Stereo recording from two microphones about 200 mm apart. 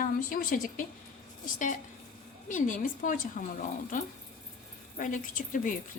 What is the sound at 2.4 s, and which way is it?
Speech, 40° left (ahead or behind).